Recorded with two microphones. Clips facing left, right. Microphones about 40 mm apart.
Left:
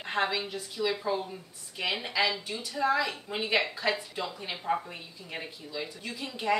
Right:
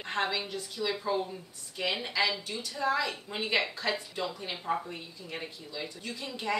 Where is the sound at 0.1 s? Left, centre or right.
Centre.